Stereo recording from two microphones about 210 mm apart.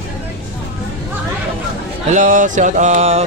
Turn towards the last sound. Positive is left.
turn(degrees=-35)  # may be behind; listen again after turning